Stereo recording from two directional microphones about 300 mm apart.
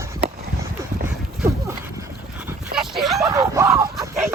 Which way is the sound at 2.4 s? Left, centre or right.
Centre.